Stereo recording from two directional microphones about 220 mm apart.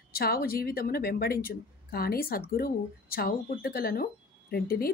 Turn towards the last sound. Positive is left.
turn(degrees=45)  # may be behind; listen again after turning